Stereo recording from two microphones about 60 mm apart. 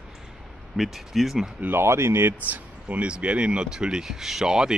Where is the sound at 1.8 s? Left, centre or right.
Right.